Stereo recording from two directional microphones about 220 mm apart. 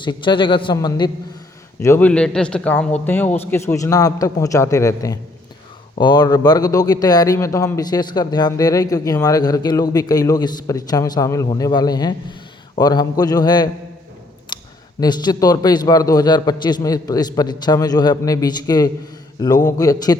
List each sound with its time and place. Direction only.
0.0 s a man's voice: 20° left (ahead or behind)
15.0 s speech: 20° left (ahead or behind)